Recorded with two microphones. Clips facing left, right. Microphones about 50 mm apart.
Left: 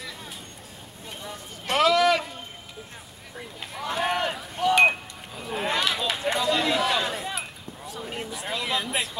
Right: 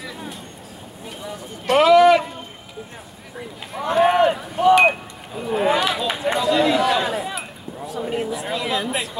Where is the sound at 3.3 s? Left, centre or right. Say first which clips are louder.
Right 6 dB; centre.